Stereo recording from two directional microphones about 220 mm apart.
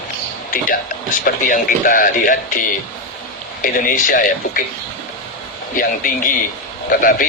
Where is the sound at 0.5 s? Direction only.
40° left (ahead or behind).